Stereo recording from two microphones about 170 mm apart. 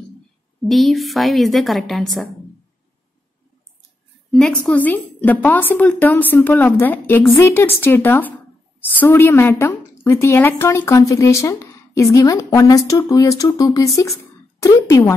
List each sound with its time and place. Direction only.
0.7 s a woman's voice: centre (ahead or behind)
4.3 s a woman's voice: 5° left (ahead or behind)